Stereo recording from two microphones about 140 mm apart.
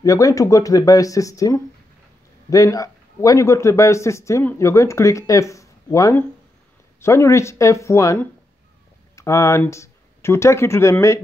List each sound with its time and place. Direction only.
0.0 s speech: 25° left (ahead or behind)